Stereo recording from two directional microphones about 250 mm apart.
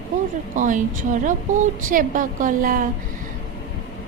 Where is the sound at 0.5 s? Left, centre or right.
Right.